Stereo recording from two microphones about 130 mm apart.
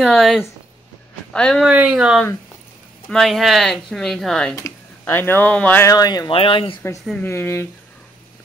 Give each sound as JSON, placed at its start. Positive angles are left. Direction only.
{"t": 0.0, "sound": "speech", "side_deg": 0}
{"t": 1.7, "sound": "speech", "side_deg": -10}
{"t": 4.6, "sound": "speech", "side_deg": 20}
{"t": 5.9, "sound": "speech", "side_deg": 30}
{"t": 6.3, "sound": "speech", "side_deg": 45}
{"t": 7.2, "sound": "speech", "side_deg": 20}